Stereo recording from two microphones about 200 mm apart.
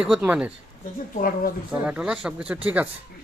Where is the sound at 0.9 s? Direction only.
40° left (ahead or behind).